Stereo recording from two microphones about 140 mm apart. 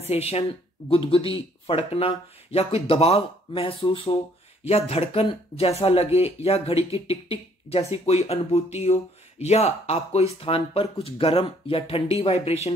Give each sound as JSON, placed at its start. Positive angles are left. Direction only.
{"t": 0.0, "sound": "speech", "side_deg": 50}